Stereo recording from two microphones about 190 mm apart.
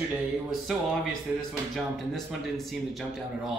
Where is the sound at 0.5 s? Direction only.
Centre (ahead or behind).